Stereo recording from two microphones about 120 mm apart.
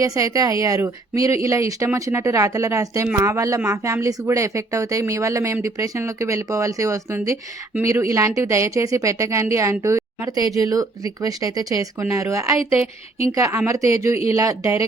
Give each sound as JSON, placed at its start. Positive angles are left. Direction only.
{"t": 0.0, "sound": "speech", "side_deg": -30}